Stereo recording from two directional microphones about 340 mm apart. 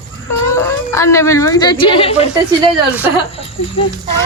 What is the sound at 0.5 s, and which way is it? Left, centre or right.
A woman's voice, centre.